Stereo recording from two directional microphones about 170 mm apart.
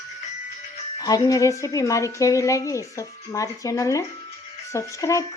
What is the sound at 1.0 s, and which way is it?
A woman's voice, 20° left (ahead or behind).